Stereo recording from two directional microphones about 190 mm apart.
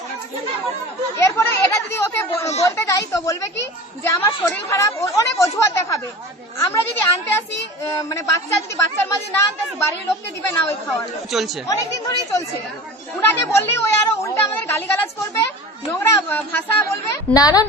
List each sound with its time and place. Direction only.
1.1 s a child's voice: 15° left (ahead or behind)
11.3 s speech: centre (ahead or behind)
11.7 s a woman's voice: 20° left (ahead or behind)